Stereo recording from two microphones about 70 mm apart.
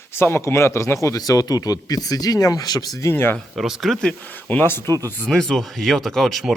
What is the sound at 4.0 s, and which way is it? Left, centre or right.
Speech, centre.